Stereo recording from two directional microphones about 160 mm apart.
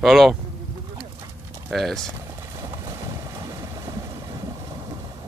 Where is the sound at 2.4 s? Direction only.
20° right (ahead or behind).